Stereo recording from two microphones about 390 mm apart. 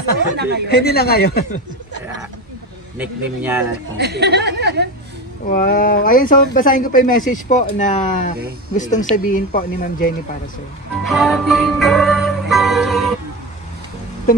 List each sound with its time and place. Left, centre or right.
0.4 s speech: right
0.7 s speech: left
3.0 s speech: centre
4.0 s speech: right
5.5 s speech: left
11.1 s music: centre